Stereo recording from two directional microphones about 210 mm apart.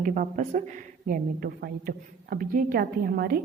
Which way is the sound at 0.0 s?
40° right (ahead or behind).